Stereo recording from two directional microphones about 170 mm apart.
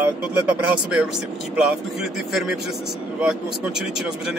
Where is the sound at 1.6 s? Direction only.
5° right (ahead or behind).